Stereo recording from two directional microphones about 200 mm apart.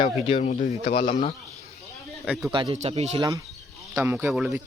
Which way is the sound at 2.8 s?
35° right (ahead or behind).